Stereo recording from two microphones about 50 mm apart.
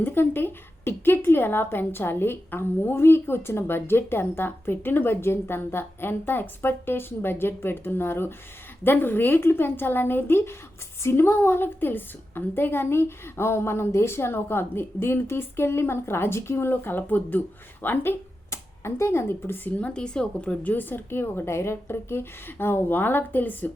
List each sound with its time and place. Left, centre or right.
0.0 s a woman's voice: left
17.8 s a woman's voice: left
18.5 s speech: left
19.9 s a woman's voice: centre
20.7 s a woman's voice: left